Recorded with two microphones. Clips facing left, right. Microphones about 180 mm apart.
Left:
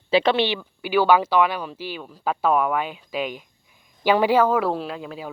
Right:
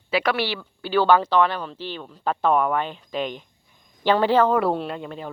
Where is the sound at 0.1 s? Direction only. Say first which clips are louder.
Left 4 dB; 25° left (ahead or behind).